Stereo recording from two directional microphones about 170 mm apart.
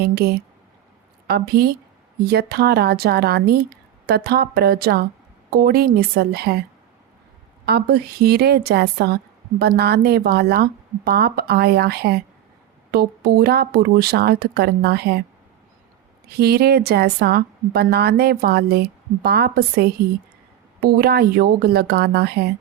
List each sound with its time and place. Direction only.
0.0 s a woman's voice: 70° right (ahead or behind)
7.6 s speech: 70° right (ahead or behind)
16.3 s speech: 70° right (ahead or behind)